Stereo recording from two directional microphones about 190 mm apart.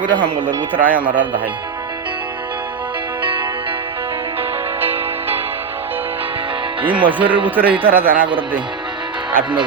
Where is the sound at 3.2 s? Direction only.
25° right (ahead or behind).